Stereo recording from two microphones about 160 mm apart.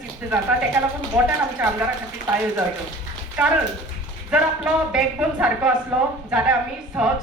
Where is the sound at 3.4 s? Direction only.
10° right (ahead or behind).